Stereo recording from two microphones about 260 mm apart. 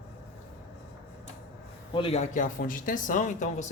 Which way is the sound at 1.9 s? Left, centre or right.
Left.